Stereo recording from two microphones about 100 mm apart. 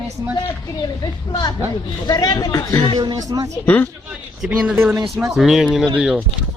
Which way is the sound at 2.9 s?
45° right (ahead or behind).